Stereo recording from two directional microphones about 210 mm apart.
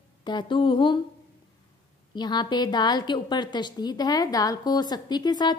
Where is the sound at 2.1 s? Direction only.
20° left (ahead or behind).